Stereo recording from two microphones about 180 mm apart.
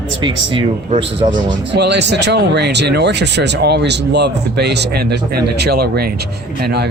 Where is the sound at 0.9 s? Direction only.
30° right (ahead or behind).